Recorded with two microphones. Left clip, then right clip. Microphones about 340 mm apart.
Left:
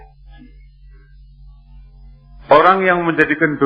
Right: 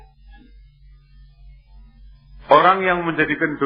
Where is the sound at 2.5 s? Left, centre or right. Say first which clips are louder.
Left 3 dB; right.